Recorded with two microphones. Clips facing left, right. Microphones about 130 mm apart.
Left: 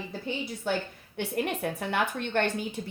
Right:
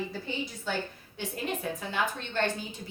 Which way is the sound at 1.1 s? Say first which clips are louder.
Left 4 dB; 60° left (ahead or behind).